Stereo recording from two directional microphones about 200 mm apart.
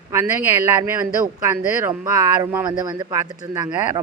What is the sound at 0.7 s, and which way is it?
Speech, 15° right (ahead or behind).